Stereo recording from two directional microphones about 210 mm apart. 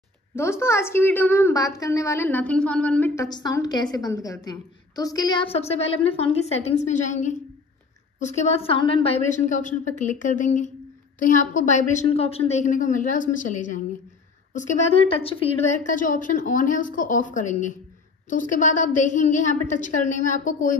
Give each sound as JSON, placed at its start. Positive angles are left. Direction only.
{"t": 0.4, "sound": "a woman's voice", "side_deg": 10}
{"t": 3.3, "sound": "a woman's voice", "side_deg": 20}